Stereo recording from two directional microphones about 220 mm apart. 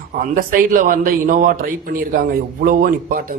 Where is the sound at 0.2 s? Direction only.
40° right (ahead or behind).